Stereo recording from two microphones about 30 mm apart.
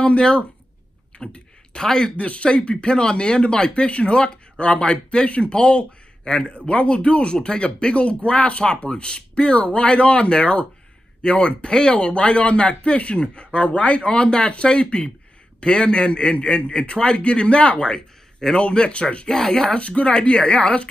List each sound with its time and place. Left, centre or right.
0.0 s speech: left
1.1 s a sound: left
1.8 s speech: left
2.1 s speech: left
7.3 s speech: left
7.6 s speech: left
17.9 s a sound: left
18.7 s speech: left
19.2 s speech: left